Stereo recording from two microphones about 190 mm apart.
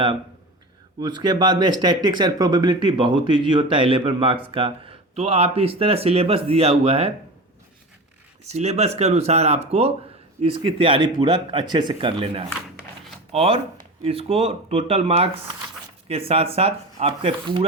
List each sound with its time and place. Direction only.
0.9 s speech: 20° right (ahead or behind)
8.4 s speech: 35° right (ahead or behind)